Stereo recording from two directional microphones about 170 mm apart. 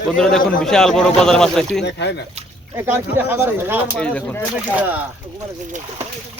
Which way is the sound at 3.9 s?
5° left (ahead or behind).